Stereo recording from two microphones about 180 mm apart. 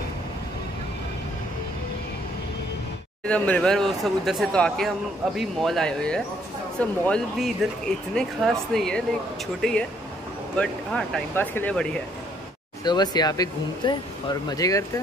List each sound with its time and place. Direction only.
3.3 s speech: 5° left (ahead or behind)
12.8 s speech: 25° left (ahead or behind)